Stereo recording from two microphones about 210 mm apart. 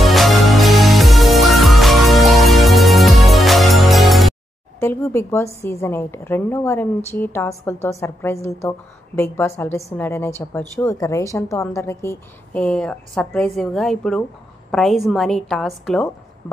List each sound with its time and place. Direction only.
0.0 s music: centre (ahead or behind)
4.7 s a woman's voice: 10° left (ahead or behind)